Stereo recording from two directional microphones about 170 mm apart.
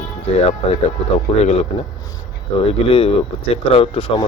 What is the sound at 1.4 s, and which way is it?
Speech, 40° left (ahead or behind).